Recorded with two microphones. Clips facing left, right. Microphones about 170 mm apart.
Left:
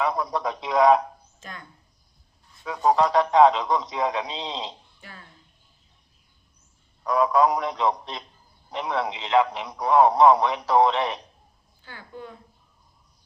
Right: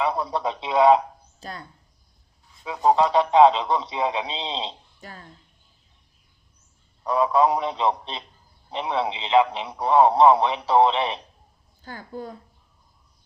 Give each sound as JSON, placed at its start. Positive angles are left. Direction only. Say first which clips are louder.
{"t": 0.0, "sound": "speech", "louder": "right 1 dB", "side_deg": -30}
{"t": 2.6, "sound": "speech", "louder": "right 1 dB", "side_deg": -15}
{"t": 3.1, "sound": "speech", "louder": "right 1 dB", "side_deg": -30}
{"t": 7.1, "sound": "speech", "louder": "even", "side_deg": -30}
{"t": 11.8, "sound": "a woman's voice", "louder": "right 5 dB", "side_deg": -40}